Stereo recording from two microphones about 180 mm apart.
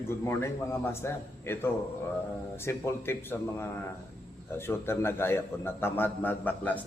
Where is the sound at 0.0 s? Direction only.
15° left (ahead or behind).